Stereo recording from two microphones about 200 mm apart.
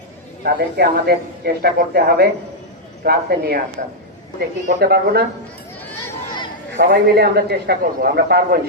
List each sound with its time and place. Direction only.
0.4 s speech: 55° right (ahead or behind)
6.1 s a sound: 20° left (ahead or behind)
6.9 s speech: 55° right (ahead or behind)